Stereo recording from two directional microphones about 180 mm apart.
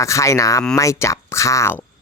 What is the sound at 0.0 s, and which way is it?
Speech, 15° left (ahead or behind).